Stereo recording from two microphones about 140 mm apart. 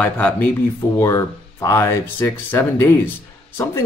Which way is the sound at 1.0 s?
20° left (ahead or behind).